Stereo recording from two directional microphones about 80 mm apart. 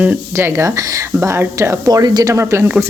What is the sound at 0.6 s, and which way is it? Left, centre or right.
Speech, right.